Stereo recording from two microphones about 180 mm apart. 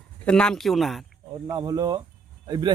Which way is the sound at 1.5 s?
20° right (ahead or behind).